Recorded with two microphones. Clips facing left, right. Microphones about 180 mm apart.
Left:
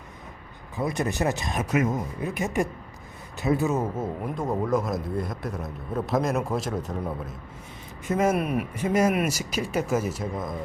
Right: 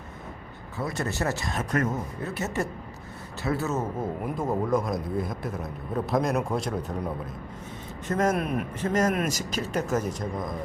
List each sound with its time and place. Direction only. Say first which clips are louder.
0.8 s speech: left 3 dB; 15° left (ahead or behind)
4.0 s a man's voice: even; centre (ahead or behind)